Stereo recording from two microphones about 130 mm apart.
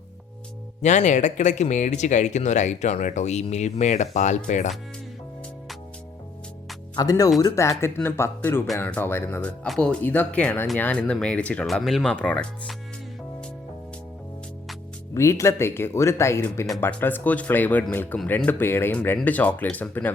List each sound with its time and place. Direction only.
0.8 s speech: 65° left (ahead or behind)
6.9 s speech: 30° left (ahead or behind)
9.6 s speech: 5° left (ahead or behind)
15.1 s speech: 20° left (ahead or behind)